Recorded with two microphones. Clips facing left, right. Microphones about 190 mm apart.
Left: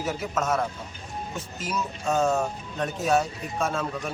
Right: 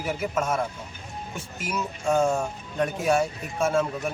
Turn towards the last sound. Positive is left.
turn(degrees=-10)  # may be behind; listen again after turning